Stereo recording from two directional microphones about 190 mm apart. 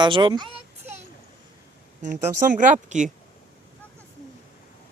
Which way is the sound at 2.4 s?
45° right (ahead or behind).